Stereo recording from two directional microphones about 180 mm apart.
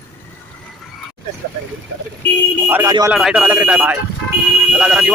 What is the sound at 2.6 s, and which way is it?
Speech, 10° right (ahead or behind).